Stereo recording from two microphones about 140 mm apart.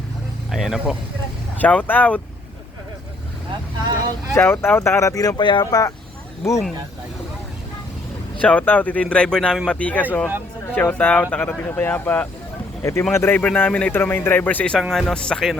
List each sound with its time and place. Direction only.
0.5 s speech: centre (ahead or behind)
1.6 s speech: 10° left (ahead or behind)
4.4 s speech: 15° left (ahead or behind)
8.4 s speech: 10° left (ahead or behind)